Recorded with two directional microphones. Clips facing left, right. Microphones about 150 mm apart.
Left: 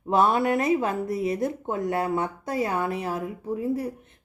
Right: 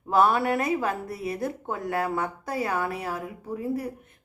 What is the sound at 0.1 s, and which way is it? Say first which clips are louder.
A woman's voice: left 1 dB; 20° left (ahead or behind).